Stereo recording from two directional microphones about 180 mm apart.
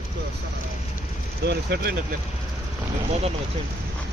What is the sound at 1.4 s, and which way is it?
Speech, 65° right (ahead or behind).